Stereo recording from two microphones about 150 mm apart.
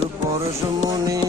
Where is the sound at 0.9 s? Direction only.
25° right (ahead or behind).